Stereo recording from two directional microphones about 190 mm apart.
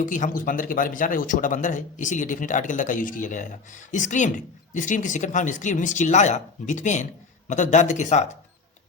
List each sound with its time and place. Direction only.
0.0 s speech: 45° left (ahead or behind)